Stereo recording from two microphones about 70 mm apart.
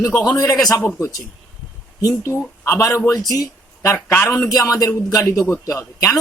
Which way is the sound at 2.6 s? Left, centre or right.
Left.